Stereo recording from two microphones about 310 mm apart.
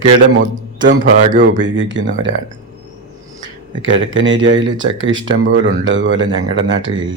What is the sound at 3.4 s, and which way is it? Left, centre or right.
Speech, right.